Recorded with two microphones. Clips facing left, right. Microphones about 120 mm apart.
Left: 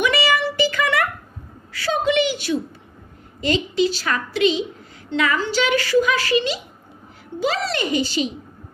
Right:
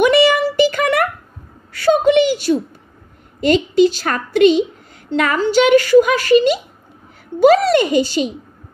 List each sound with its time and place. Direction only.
0.0 s music: 50° right (ahead or behind)
1.7 s a sound: 50° right (ahead or behind)
3.4 s a woman's voice: 50° right (ahead or behind)